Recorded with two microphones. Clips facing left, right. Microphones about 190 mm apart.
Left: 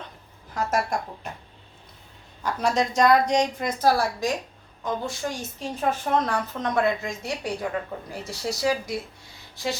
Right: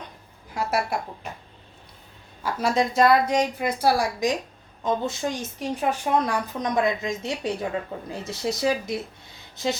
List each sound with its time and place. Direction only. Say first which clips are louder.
0.5 s a woman's voice: even; 10° right (ahead or behind)
2.4 s a woman's voice: right 1 dB; 5° right (ahead or behind); by 9.7 s 20° right (ahead or behind)